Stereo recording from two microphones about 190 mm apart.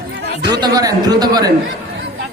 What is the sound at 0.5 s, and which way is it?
Speech, 20° right (ahead or behind).